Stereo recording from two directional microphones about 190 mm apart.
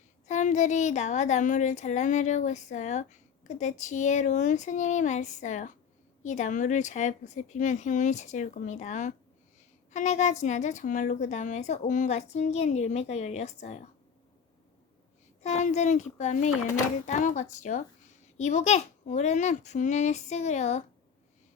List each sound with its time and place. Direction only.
0.3 s speech: 40° left (ahead or behind)
15.4 s speech: 35° left (ahead or behind)